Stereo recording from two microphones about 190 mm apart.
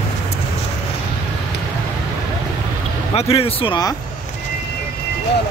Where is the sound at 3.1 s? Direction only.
30° left (ahead or behind).